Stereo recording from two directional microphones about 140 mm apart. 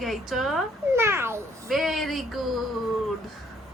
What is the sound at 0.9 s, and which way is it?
Speech, 15° right (ahead or behind).